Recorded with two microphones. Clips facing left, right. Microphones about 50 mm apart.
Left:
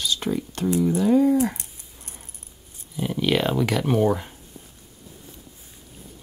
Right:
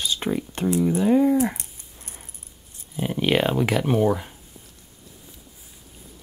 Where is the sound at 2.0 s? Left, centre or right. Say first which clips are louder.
Right 1 dB; centre.